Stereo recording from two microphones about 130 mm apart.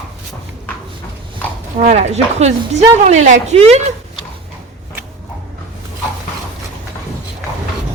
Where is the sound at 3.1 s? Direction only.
70° right (ahead or behind).